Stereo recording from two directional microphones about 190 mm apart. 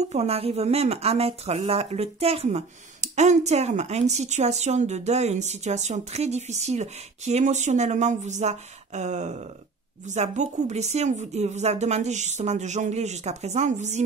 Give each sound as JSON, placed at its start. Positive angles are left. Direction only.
{"t": 0.1, "sound": "speech", "side_deg": -35}